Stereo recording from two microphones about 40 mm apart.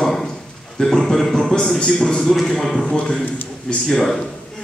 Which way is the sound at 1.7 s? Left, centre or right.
Left.